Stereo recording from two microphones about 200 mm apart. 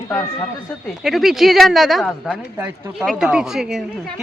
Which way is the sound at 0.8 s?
Centre (ahead or behind).